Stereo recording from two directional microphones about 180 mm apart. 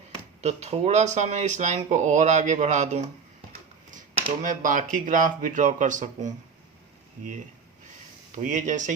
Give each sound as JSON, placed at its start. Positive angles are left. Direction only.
{"t": 0.4, "sound": "speech", "side_deg": -35}
{"t": 4.4, "sound": "speech", "side_deg": -45}
{"t": 8.4, "sound": "speech", "side_deg": -45}